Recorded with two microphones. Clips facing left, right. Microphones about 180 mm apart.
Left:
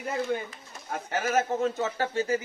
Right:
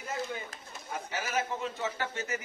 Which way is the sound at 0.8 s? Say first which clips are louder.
Left 7 dB; 55° left (ahead or behind).